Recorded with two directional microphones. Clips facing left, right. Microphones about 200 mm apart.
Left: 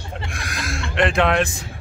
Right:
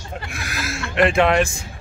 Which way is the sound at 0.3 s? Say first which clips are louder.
Right 1 dB; 5° right (ahead or behind).